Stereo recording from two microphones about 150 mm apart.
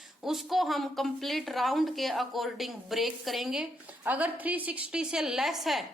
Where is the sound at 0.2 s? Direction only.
Centre (ahead or behind).